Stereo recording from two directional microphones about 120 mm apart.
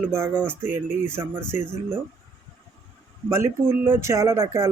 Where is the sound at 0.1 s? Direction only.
15° right (ahead or behind).